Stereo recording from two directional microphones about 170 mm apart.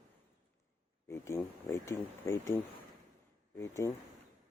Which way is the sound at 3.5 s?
15° left (ahead or behind).